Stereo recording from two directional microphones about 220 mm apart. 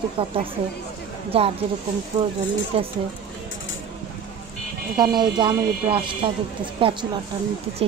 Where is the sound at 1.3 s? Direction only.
25° right (ahead or behind).